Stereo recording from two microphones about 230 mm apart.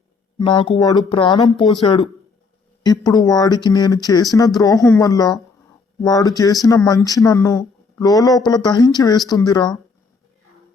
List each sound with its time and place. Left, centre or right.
0.3 s speech: left